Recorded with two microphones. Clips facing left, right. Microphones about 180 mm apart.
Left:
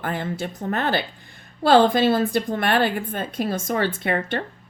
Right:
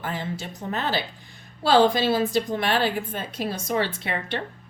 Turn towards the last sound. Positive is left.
turn(degrees=50)  # may be behind; listen again after turning